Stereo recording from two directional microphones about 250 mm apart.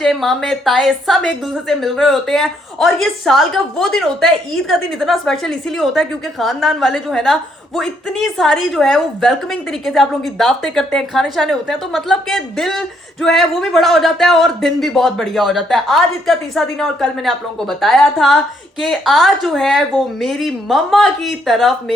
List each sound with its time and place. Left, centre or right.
0.0 s speech: centre